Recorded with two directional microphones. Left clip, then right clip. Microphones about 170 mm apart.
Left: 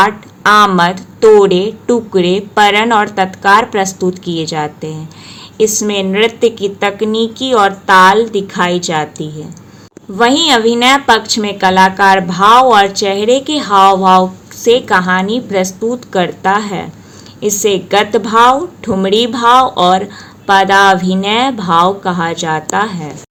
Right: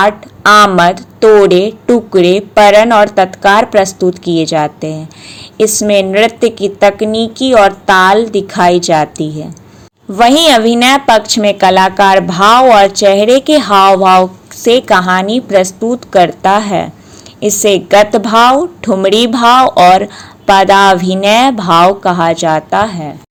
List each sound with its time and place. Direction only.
0.0 s a woman's voice: 25° right (ahead or behind)